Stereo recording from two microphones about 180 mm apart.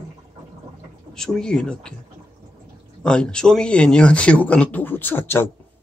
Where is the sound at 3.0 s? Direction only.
5° left (ahead or behind).